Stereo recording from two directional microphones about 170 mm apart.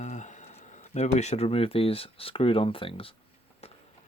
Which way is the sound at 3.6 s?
35° left (ahead or behind).